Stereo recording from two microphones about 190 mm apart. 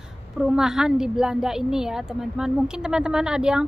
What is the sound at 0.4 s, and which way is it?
A woman's voice, 5° right (ahead or behind).